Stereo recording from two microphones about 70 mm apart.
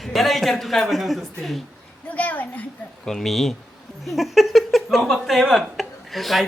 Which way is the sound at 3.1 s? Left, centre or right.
Centre.